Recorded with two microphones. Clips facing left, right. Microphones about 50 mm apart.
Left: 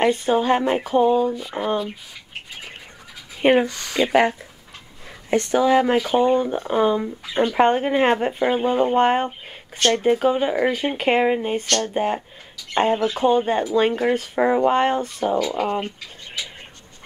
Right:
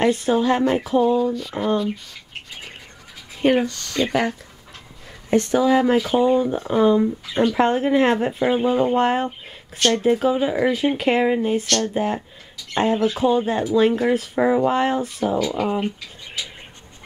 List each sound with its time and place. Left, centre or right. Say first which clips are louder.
0.0 s speech: even; centre
3.4 s speech: left 1 dB; centre
5.5 s speech: left 1 dB; centre
9.8 s speech: even; left
13.9 s speech: right 1 dB; centre